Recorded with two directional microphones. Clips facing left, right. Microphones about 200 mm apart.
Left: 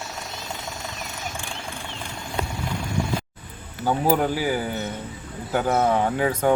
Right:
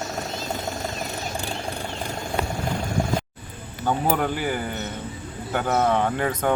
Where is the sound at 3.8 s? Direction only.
5° left (ahead or behind).